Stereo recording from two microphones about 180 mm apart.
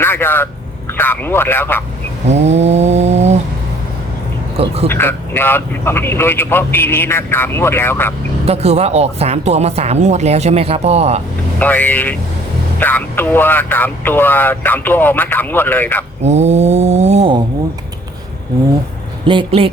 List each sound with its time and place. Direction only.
0.0 s speech: 10° left (ahead or behind)
2.3 s a sound: 40° right (ahead or behind)
4.9 s speech: 10° left (ahead or behind)
8.4 s speech: 35° right (ahead or behind)
11.6 s speech: 10° left (ahead or behind)
16.2 s speech: 40° right (ahead or behind)
19.2 s speech: 30° right (ahead or behind)